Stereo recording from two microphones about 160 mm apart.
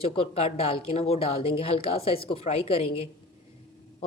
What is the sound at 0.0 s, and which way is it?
A woman's voice, 35° left (ahead or behind).